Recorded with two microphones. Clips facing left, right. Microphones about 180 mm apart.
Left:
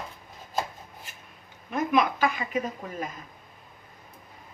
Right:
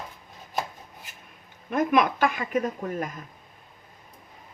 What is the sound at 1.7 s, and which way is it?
Speech, 50° right (ahead or behind).